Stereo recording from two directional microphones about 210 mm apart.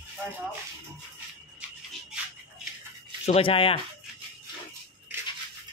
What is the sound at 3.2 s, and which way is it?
Speech, 25° left (ahead or behind).